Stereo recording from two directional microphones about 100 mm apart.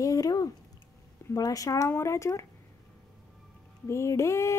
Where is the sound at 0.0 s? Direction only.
35° left (ahead or behind).